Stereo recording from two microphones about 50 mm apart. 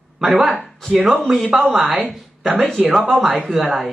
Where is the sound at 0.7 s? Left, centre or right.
Centre.